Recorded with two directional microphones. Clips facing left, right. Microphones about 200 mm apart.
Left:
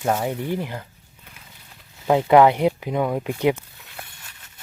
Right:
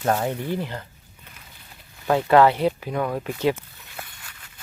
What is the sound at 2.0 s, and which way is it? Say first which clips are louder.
Speech: left 2 dB; 15° left (ahead or behind).